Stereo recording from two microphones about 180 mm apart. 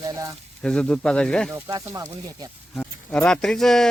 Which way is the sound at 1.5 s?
20° right (ahead or behind).